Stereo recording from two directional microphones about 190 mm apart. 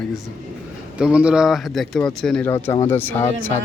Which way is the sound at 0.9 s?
5° right (ahead or behind).